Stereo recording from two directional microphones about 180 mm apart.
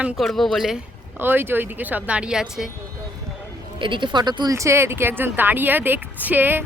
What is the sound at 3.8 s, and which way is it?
Speech, 25° right (ahead or behind).